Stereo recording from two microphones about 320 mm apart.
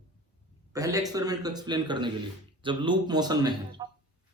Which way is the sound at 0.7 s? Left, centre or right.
Centre.